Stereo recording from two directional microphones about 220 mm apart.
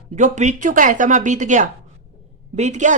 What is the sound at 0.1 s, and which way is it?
Speech, 35° right (ahead or behind).